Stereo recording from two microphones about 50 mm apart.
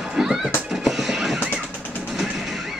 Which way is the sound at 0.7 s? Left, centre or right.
Centre.